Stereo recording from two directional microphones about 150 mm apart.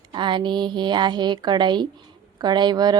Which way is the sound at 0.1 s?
30° right (ahead or behind).